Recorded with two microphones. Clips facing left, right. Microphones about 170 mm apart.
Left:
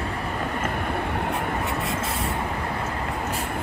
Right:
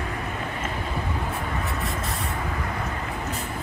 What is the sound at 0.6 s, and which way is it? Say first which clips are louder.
Vehicle: left 3 dB; 60° left (ahead or behind).